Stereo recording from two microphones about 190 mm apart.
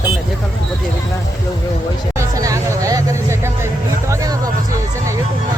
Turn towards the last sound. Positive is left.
turn(degrees=-20)  # may be behind; listen again after turning